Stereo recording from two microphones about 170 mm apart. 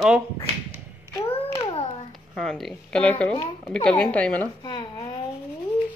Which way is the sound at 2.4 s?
Centre (ahead or behind).